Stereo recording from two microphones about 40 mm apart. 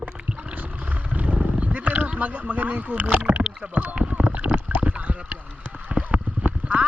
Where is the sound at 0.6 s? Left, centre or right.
Right.